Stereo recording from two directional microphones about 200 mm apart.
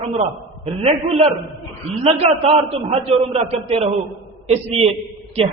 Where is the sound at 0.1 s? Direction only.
30° right (ahead or behind).